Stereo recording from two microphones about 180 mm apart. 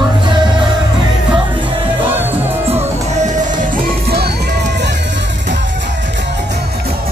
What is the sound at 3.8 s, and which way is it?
Music, 60° right (ahead or behind).